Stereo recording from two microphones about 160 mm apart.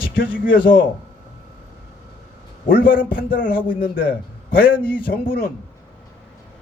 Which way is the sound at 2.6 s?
65° left (ahead or behind).